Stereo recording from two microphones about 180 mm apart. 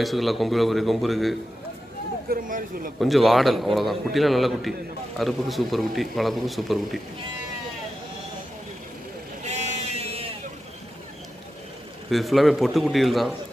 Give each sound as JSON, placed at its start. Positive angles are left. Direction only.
{"t": 0.0, "sound": "a man's voice", "side_deg": 0}
{"t": 2.2, "sound": "speech", "side_deg": -50}
{"t": 3.0, "sound": "a man's voice", "side_deg": 0}
{"t": 9.5, "sound": "sheep", "side_deg": -40}
{"t": 12.1, "sound": "a man's voice", "side_deg": 0}